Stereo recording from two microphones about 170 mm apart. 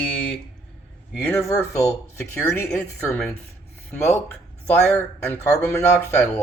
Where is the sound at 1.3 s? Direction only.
15° left (ahead or behind).